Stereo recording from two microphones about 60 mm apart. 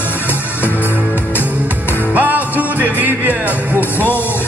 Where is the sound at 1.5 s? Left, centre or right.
Right.